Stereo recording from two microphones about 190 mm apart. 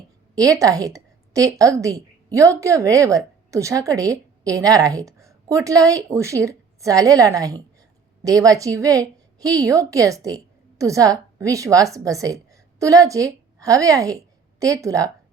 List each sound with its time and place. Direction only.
0.3 s a woman's voice: 20° right (ahead or behind)